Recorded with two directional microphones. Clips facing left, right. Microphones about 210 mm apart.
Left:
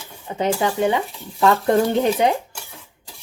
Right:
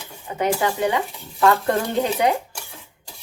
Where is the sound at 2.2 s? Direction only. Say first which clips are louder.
Right 1 dB; 20° left (ahead or behind).